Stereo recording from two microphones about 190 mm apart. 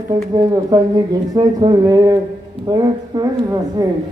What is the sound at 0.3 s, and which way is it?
Speech, 20° right (ahead or behind).